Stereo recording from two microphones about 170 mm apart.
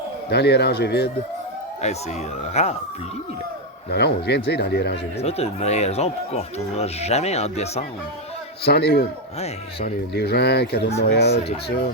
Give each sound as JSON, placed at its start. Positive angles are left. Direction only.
{"t": 0.3, "sound": "speech", "side_deg": 75}
{"t": 2.5, "sound": "speech", "side_deg": 40}
{"t": 3.9, "sound": "speech", "side_deg": 75}
{"t": 5.2, "sound": "speech", "side_deg": 40}
{"t": 8.6, "sound": "speech", "side_deg": 70}